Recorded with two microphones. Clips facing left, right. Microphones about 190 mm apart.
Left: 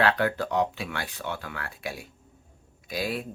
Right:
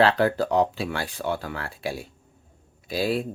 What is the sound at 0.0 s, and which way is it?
Speech, 35° right (ahead or behind).